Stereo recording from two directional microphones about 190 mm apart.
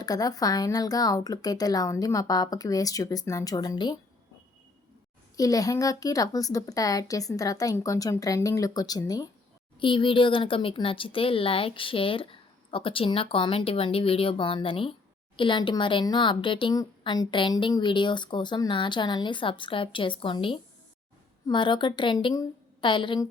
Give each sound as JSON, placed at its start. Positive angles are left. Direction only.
{"t": 0.0, "sound": "a woman's voice", "side_deg": 20}
{"t": 5.4, "sound": "a woman's voice", "side_deg": 20}